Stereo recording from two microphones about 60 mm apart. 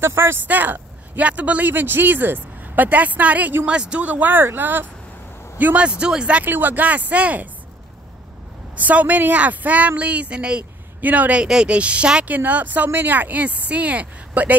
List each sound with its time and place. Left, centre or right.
0.0 s speech: right
0.5 s speech: right
5.9 s speech: centre
6.4 s speech: right
8.7 s speech: right
11.0 s speech: right
11.4 s speech: centre
11.7 s speech: right